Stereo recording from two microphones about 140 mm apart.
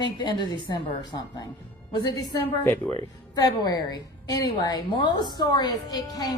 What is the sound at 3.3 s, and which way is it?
A woman's voice, 25° left (ahead or behind).